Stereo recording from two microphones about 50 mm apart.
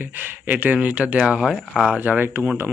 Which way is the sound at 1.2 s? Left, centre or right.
Centre.